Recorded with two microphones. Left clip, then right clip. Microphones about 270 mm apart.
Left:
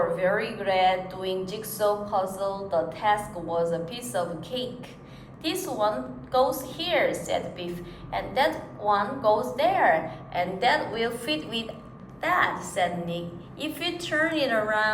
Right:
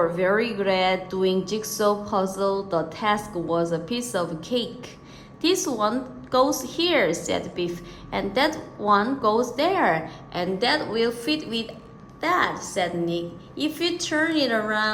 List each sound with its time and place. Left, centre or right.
0.2 s a woman's voice: right